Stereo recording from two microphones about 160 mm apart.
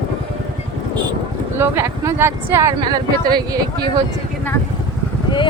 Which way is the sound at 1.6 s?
15° right (ahead or behind).